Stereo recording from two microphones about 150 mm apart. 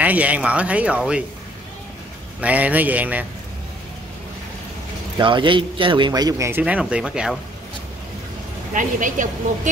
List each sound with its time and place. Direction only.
0.0 s speech: 10° right (ahead or behind)
2.4 s speech: 10° right (ahead or behind)
5.1 s a man's voice: 35° right (ahead or behind)
6.6 s speech: 5° right (ahead or behind)
8.7 s a woman's voice: 60° right (ahead or behind)